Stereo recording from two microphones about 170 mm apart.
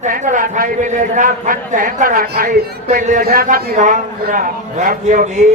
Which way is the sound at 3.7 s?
50° right (ahead or behind).